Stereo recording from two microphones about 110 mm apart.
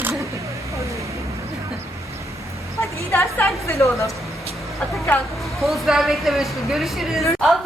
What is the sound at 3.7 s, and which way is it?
Speech, 25° left (ahead or behind).